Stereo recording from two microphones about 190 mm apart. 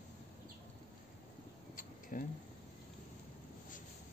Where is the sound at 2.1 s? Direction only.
45° left (ahead or behind).